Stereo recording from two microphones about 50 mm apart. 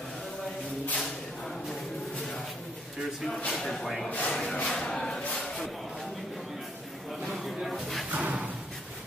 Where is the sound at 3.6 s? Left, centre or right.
Centre.